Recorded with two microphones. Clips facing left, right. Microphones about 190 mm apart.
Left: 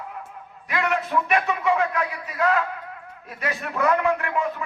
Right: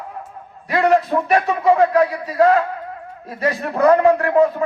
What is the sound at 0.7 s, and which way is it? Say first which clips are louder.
A man's voice: right 8 dB; 35° right (ahead or behind).